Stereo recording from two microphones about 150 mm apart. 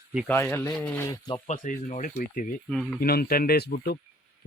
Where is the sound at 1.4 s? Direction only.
55° left (ahead or behind).